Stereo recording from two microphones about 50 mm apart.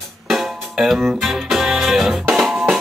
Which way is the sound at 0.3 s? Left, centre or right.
Centre.